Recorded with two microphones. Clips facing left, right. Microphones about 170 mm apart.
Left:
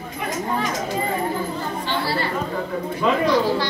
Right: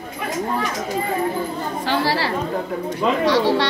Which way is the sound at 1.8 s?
90° right.